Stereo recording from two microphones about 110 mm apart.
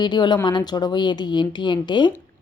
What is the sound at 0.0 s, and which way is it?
A woman's voice, 45° left (ahead or behind).